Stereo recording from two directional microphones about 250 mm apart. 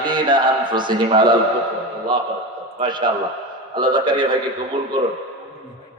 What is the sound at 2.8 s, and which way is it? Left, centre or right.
A man's voice, centre.